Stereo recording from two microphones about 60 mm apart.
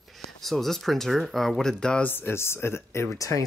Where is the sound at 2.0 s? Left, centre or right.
Left.